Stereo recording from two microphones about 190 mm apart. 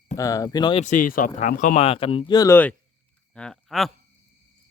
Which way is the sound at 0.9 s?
45° left (ahead or behind).